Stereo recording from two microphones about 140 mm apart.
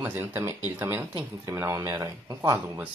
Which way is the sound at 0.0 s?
15° right (ahead or behind).